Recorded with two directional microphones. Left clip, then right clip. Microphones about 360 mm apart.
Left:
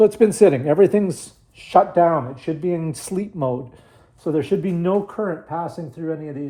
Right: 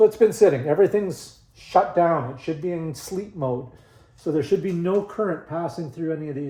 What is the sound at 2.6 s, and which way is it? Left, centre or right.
Speech, left.